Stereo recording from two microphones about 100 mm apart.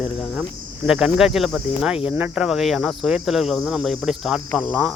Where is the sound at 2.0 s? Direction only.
15° right (ahead or behind).